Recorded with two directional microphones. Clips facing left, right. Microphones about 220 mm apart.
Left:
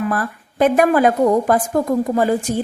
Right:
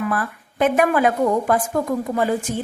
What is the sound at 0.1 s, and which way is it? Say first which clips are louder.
A woman's voice: left 2 dB; 40° left (ahead or behind).